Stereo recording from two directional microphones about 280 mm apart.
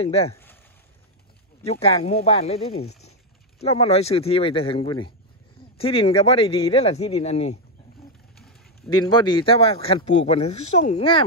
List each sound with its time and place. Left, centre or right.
0.0 s speech: left
1.6 s speech: left
2.7 s speech: left
3.6 s speech: left
8.4 s a sound: centre
9.0 s speech: centre